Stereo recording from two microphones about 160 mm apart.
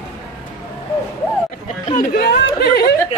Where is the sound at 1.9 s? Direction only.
75° left (ahead or behind).